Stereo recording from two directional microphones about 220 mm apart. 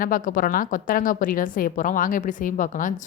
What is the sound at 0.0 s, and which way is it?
A woman's voice, 40° left (ahead or behind).